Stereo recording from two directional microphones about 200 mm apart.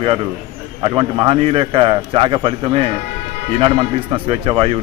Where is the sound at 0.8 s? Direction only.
25° right (ahead or behind).